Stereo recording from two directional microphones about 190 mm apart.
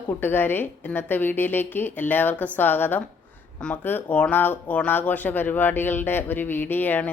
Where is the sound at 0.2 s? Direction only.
10° left (ahead or behind).